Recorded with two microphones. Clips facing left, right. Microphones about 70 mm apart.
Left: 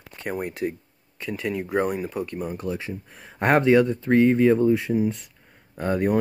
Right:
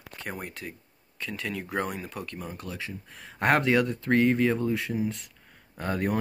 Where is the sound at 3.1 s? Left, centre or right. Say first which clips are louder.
Left 3 dB; centre.